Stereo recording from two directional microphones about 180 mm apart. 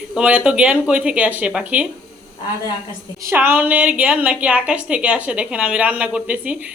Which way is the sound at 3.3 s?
10° right (ahead or behind).